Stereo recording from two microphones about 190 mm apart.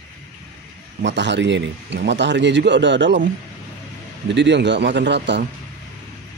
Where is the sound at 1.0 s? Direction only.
70° right (ahead or behind).